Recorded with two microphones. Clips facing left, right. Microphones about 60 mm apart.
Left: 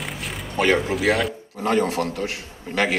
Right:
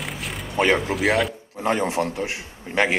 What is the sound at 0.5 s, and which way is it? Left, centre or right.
Speech, right.